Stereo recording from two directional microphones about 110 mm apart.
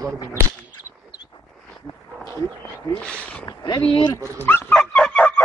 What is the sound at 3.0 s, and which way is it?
Speech, 10° left (ahead or behind).